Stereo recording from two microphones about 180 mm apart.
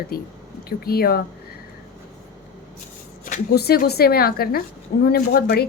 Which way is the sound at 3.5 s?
60° left (ahead or behind).